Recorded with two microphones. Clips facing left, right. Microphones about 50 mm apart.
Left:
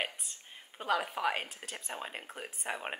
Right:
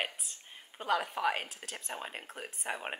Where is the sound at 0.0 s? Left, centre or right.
Centre.